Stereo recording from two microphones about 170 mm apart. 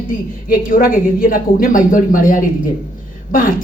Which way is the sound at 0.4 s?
55° left (ahead or behind).